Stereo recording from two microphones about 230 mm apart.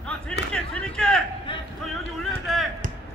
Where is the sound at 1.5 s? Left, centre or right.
Left.